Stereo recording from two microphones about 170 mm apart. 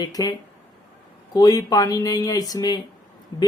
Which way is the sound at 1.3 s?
20° left (ahead or behind).